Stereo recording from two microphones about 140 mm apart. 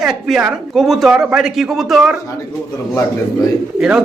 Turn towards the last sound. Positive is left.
turn(degrees=-5)  # may be behind; listen again after turning